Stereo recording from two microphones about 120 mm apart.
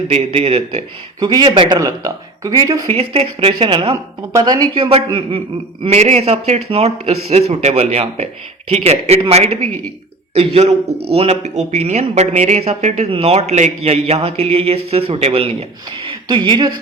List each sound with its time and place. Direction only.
0.1 s speech: 55° right (ahead or behind)
1.2 s speech: 35° right (ahead or behind)
1.8 s speech: 30° right (ahead or behind)
2.8 s speech: 55° right (ahead or behind)
4.3 s speech: 35° right (ahead or behind)
4.7 s a man's voice: 50° right (ahead or behind)
5.9 s speech: 65° right (ahead or behind)
16.0 s speech: 40° right (ahead or behind)